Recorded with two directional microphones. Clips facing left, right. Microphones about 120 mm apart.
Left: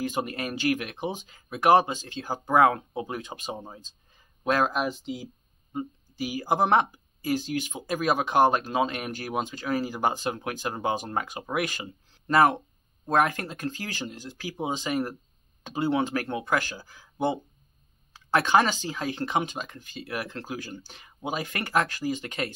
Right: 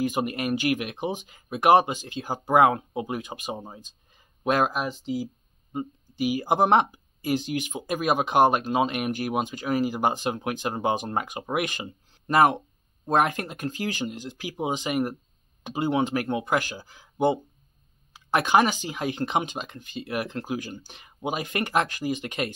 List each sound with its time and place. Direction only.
0.0 s speech: 15° right (ahead or behind)
4.7 s speech: centre (ahead or behind)
5.7 s speech: 20° right (ahead or behind)